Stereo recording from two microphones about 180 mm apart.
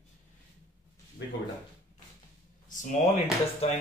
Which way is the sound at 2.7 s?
45° left (ahead or behind).